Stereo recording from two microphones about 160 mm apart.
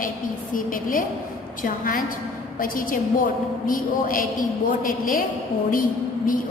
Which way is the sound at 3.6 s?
60° left (ahead or behind).